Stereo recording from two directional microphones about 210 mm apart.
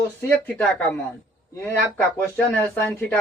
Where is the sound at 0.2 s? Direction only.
5° left (ahead or behind).